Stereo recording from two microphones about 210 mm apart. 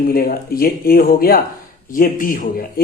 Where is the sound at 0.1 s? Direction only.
45° left (ahead or behind).